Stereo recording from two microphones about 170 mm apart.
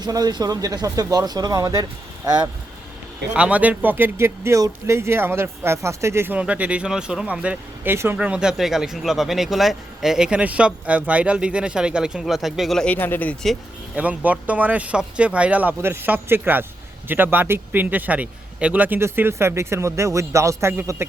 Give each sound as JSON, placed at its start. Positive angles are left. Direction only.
{"t": 0.0, "sound": "speech", "side_deg": -25}
{"t": 3.3, "sound": "speech", "side_deg": -5}
{"t": 13.9, "sound": "speech", "side_deg": -10}